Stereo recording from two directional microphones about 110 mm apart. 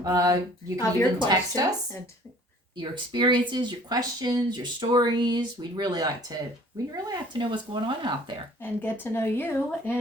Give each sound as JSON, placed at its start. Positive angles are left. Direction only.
{"t": 0.0, "sound": "speech", "side_deg": -30}
{"t": 2.7, "sound": "speech", "side_deg": -45}
{"t": 8.6, "sound": "speech", "side_deg": 20}